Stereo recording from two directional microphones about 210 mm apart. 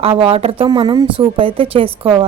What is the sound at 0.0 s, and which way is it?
Speech, 25° right (ahead or behind).